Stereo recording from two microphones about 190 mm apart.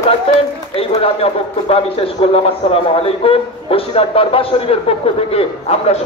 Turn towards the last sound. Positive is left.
turn(degrees=35)  # may be behind; listen again after turning